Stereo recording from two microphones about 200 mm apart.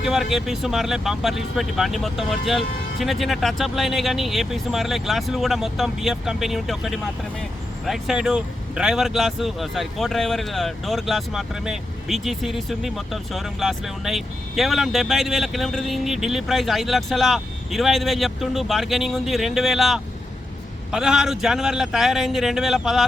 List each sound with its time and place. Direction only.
0.0 s speech: centre (ahead or behind)